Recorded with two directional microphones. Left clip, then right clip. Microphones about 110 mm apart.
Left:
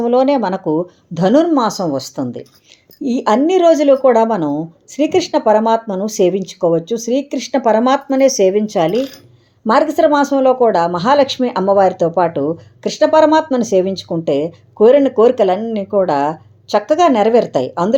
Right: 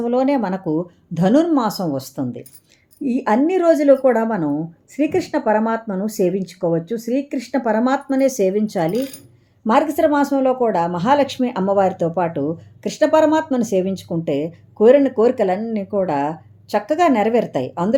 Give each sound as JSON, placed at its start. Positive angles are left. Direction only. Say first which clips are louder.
{"t": 0.0, "sound": "a woman's voice", "louder": "left 5 dB", "side_deg": 5}